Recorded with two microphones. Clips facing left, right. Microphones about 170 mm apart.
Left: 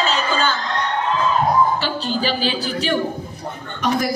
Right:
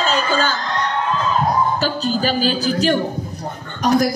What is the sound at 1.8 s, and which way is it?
A woman's voice, 40° right (ahead or behind).